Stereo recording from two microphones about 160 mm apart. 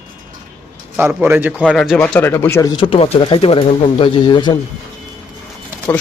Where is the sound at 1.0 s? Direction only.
10° right (ahead or behind).